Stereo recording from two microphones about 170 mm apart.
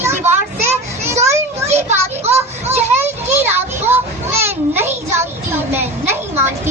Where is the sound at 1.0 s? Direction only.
15° right (ahead or behind).